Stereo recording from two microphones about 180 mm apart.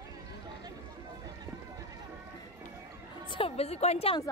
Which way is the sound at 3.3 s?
30° left (ahead or behind).